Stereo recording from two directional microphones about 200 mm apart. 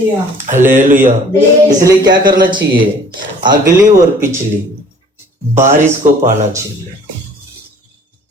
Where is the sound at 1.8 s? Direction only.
20° right (ahead or behind).